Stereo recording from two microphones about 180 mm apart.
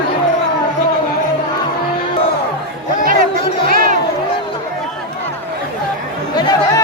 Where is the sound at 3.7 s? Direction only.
55° right (ahead or behind).